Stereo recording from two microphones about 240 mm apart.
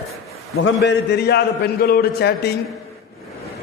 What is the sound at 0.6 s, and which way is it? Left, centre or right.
A man's voice, left.